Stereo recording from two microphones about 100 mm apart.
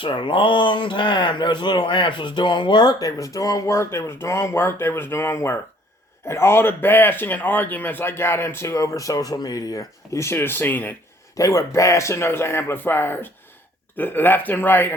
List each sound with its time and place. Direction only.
0.0 s a man's voice: 55° left (ahead or behind); by 10.9 s 20° left (ahead or behind)
11.3 s a man's voice: 30° left (ahead or behind)